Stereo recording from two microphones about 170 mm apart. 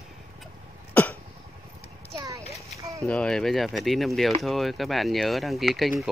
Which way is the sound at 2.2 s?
20° right (ahead or behind).